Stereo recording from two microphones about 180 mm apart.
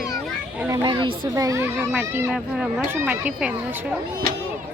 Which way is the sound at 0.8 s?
25° right (ahead or behind).